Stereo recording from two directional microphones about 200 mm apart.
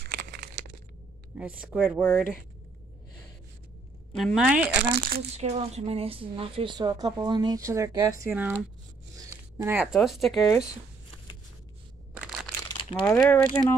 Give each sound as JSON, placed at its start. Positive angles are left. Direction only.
{"t": 0.0, "sound": "a sound", "side_deg": -55}
{"t": 1.3, "sound": "speech", "side_deg": -5}
{"t": 4.2, "sound": "speech", "side_deg": 0}
{"t": 4.8, "sound": "speech", "side_deg": -55}
{"t": 5.3, "sound": "a woman's voice", "side_deg": -35}
{"t": 9.1, "sound": "a sound", "side_deg": -15}
{"t": 9.9, "sound": "speech", "side_deg": 0}
{"t": 12.1, "sound": "crushing", "side_deg": -5}
{"t": 13.0, "sound": "speech", "side_deg": 10}